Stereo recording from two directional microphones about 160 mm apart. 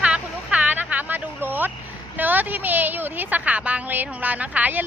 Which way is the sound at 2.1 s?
10° right (ahead or behind).